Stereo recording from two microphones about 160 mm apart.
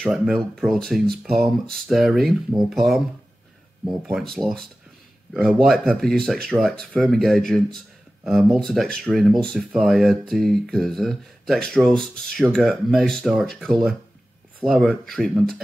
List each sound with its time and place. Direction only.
0.0 s speech: centre (ahead or behind)